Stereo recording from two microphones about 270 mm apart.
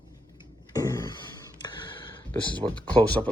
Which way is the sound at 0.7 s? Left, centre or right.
Centre.